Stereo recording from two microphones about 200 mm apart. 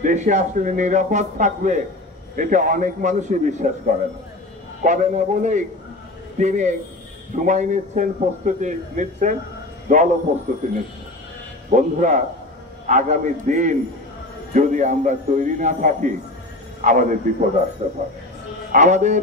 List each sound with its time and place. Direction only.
0.0 s a man's voice: 35° right (ahead or behind)
11.7 s a man's voice: 40° right (ahead or behind)